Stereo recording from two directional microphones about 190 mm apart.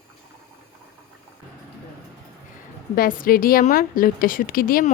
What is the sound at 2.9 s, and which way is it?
A woman's voice, 50° left (ahead or behind).